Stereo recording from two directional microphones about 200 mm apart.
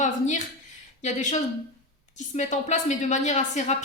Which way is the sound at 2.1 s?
35° left (ahead or behind).